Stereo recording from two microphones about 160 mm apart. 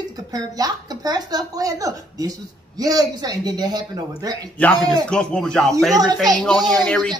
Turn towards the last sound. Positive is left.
turn(degrees=5)  # may be behind; listen again after turning